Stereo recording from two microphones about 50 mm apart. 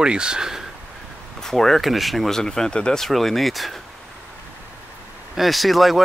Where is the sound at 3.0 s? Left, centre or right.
Centre.